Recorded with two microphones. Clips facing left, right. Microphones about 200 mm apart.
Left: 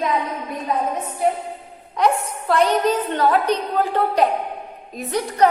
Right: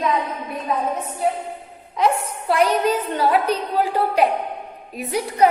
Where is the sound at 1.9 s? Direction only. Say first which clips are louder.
Left 1 dB; 5° right (ahead or behind).